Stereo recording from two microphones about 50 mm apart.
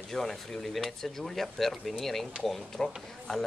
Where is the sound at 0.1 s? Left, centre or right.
Centre.